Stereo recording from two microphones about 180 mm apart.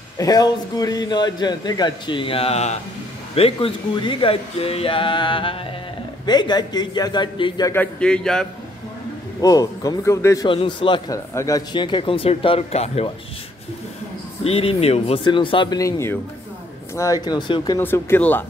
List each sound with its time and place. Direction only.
0.2 s a man's voice: 20° left (ahead or behind)
7.7 s a man's voice: 5° left (ahead or behind)
9.4 s a man's voice: 20° left (ahead or behind)
10.5 s a man's voice: 30° left (ahead or behind)
14.4 s a man's voice: 30° left (ahead or behind)
17.7 s speech: 10° left (ahead or behind)